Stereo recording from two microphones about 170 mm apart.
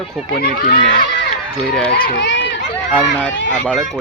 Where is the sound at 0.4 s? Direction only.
55° left (ahead or behind).